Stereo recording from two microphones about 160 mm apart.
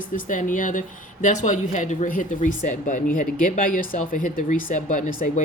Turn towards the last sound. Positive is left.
turn(degrees=50)  # may be behind; listen again after turning